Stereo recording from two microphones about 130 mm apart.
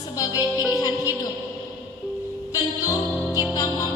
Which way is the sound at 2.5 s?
25° left (ahead or behind).